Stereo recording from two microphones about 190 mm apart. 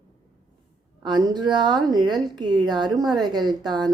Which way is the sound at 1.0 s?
25° right (ahead or behind).